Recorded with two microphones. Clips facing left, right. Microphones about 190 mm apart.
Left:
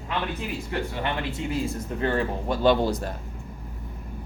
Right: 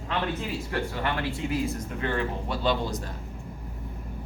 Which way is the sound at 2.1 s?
45° left (ahead or behind).